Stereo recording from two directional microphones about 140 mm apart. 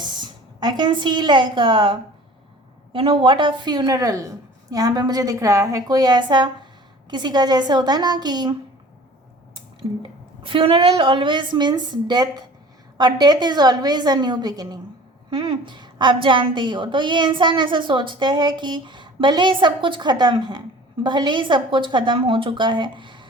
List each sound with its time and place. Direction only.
0.6 s a woman's voice: 35° right (ahead or behind)
10.4 s a woman's voice: 40° right (ahead or behind)